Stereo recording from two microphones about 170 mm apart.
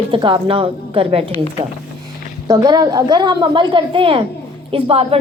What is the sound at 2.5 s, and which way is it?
A woman's voice, 25° right (ahead or behind).